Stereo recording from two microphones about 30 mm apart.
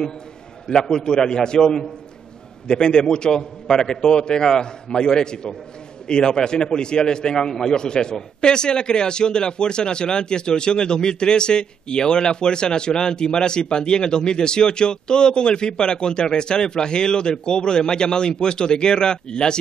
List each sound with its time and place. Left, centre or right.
0.8 s a man's voice: left